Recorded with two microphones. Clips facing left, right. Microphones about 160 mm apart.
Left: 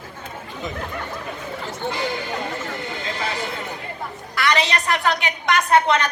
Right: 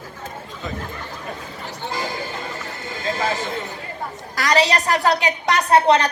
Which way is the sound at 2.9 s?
40° right (ahead or behind).